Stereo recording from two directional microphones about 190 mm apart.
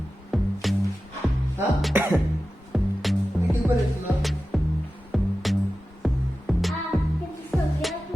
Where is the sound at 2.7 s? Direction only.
Centre (ahead or behind).